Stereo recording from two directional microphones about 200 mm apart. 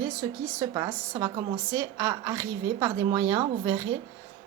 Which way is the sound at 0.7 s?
15° right (ahead or behind).